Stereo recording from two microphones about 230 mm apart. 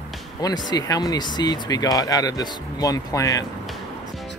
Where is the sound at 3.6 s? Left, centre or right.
Centre.